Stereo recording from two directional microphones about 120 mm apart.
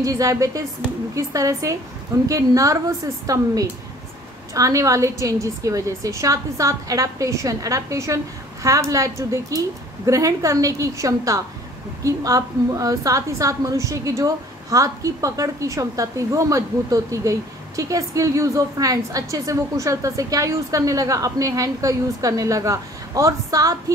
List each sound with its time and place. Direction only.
0.0 s a woman's voice: 30° right (ahead or behind)